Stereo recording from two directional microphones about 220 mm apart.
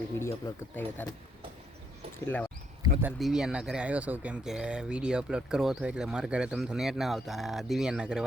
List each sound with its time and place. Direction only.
0.8 s speech: 10° left (ahead or behind)
2.1 s speech: 10° left (ahead or behind)
2.8 s speech: 5° right (ahead or behind)